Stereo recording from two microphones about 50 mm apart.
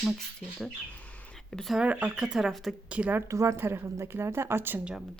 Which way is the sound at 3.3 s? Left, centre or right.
Right.